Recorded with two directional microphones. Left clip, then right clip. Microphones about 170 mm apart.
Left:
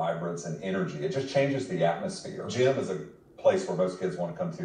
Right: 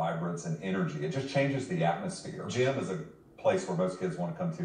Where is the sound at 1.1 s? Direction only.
10° right (ahead or behind).